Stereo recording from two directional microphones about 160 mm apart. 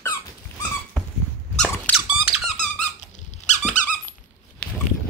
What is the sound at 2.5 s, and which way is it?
Squeak, 45° left (ahead or behind).